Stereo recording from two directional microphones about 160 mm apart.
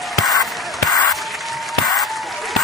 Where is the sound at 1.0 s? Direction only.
Centre (ahead or behind).